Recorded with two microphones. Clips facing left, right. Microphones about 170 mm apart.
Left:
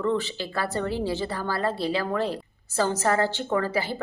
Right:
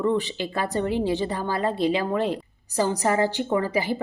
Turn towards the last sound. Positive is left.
turn(degrees=-15)  # may be behind; listen again after turning